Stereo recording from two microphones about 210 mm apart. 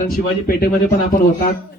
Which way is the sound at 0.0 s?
40° left (ahead or behind).